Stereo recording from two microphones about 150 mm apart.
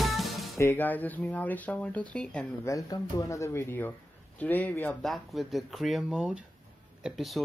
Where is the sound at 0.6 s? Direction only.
15° left (ahead or behind).